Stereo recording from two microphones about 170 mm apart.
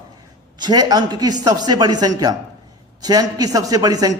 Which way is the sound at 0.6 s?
25° right (ahead or behind).